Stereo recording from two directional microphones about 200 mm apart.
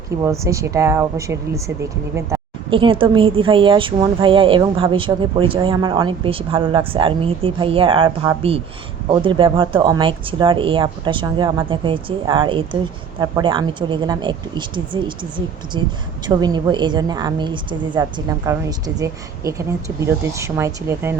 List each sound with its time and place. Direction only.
0.3 s speech: 15° right (ahead or behind)
2.3 s a sound: 15° right (ahead or behind)
2.6 s a woman's voice: 25° right (ahead or behind)